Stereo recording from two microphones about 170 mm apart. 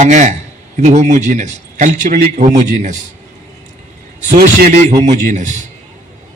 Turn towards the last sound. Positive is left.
turn(degrees=-45)  # may be behind; listen again after turning